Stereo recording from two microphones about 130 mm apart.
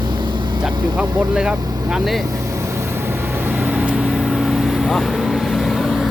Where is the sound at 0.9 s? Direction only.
5° right (ahead or behind).